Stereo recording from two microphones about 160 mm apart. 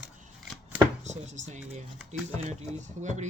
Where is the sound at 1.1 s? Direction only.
45° right (ahead or behind).